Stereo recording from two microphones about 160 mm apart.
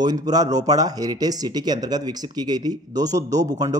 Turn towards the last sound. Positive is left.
turn(degrees=-25)  # may be behind; listen again after turning